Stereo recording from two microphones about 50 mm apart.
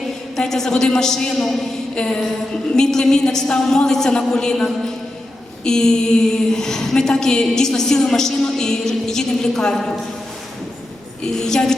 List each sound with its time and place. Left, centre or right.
0.3 s a woman's voice: centre
2.0 s a sound: centre
2.7 s a woman's voice: centre
11.3 s a woman's voice: centre